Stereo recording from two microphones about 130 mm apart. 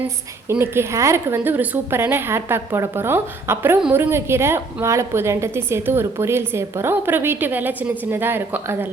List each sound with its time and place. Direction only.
0.0 s a woman's voice: 15° right (ahead or behind)